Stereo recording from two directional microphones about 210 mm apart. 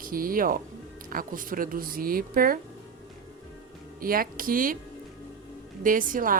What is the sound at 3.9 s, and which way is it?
Speech, 45° right (ahead or behind).